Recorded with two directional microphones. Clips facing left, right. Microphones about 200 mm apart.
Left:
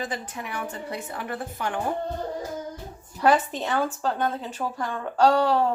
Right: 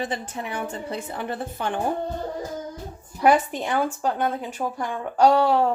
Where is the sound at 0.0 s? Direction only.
25° right (ahead or behind).